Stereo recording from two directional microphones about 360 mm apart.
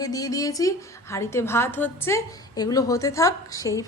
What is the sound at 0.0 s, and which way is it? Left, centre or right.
A woman's voice, centre.